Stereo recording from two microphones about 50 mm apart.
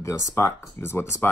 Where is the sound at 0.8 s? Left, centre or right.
Left.